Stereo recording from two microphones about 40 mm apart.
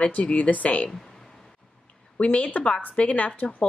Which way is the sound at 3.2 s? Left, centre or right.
Left.